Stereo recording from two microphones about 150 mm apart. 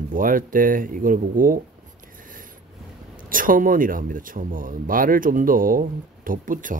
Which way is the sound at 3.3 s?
65° right (ahead or behind).